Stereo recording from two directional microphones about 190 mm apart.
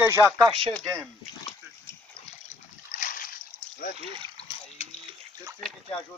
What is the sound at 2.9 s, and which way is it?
Splash, 45° left (ahead or behind).